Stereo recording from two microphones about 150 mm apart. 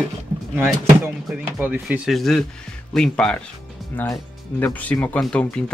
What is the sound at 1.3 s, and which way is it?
Speech, 10° right (ahead or behind).